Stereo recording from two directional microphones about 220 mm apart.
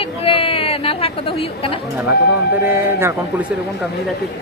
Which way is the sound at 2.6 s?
10° right (ahead or behind).